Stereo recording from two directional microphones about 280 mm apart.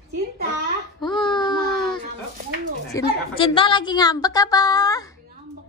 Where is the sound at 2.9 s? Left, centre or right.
Centre.